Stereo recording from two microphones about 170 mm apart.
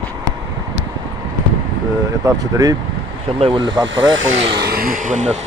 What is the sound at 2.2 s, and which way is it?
Speech, 20° right (ahead or behind).